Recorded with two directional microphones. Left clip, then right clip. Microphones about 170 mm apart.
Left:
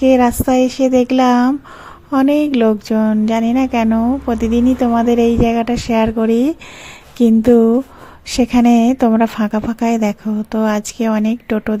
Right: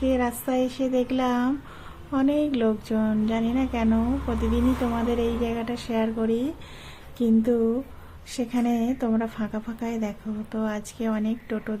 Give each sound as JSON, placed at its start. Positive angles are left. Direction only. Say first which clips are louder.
{"t": 0.0, "sound": "speech", "louder": "left 13 dB", "side_deg": 45}